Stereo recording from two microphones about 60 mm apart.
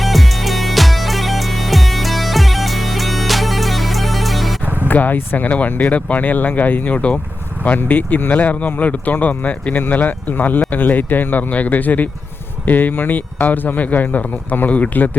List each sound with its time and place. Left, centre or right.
0.0 s music: centre
4.6 s music: right
4.9 s speech: left